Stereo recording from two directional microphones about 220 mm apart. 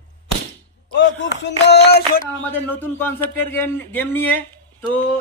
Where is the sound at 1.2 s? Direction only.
50° left (ahead or behind).